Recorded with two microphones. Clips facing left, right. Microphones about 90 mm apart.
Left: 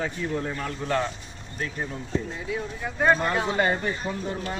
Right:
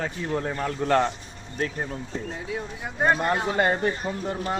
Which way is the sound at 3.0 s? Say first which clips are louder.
Even; 35° right (ahead or behind).